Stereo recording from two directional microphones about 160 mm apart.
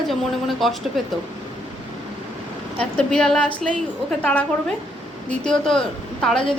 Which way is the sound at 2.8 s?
5° left (ahead or behind).